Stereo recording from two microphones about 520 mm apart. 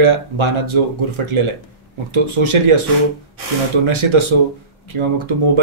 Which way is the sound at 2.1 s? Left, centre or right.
Right.